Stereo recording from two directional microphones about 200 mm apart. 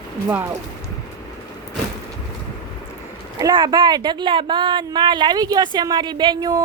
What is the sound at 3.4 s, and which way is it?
Speech, 20° right (ahead or behind).